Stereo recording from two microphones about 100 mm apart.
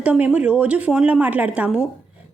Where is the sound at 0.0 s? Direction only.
10° right (ahead or behind).